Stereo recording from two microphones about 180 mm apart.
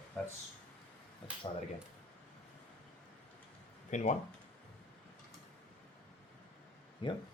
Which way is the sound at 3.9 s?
45° left (ahead or behind).